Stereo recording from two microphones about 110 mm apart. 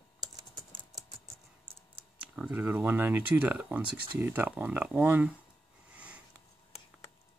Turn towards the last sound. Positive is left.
turn(degrees=-10)  # may be behind; listen again after turning